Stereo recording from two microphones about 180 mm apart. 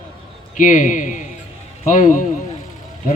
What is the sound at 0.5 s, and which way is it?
A man's voice, 45° left (ahead or behind).